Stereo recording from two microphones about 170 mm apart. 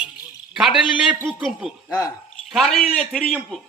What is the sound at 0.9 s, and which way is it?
Speech, 5° right (ahead or behind).